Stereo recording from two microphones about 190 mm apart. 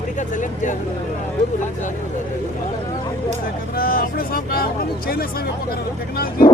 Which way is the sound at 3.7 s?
50° left (ahead or behind).